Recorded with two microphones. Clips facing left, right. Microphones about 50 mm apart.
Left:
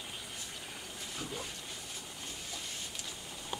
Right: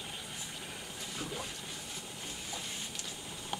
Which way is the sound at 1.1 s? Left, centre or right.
Centre.